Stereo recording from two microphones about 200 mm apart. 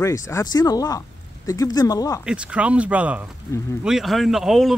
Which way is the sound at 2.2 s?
5° right (ahead or behind).